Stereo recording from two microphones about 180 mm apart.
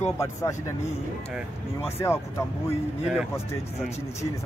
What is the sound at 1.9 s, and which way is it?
Speech, 15° left (ahead or behind).